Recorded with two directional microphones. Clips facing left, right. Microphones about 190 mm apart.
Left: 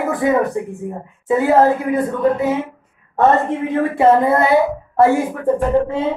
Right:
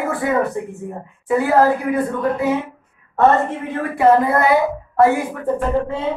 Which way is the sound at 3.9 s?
25° left (ahead or behind).